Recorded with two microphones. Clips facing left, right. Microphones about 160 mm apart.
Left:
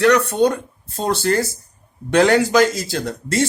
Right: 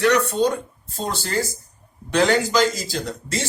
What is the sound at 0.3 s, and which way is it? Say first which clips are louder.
Speech: left 3 dB; 65° left (ahead or behind).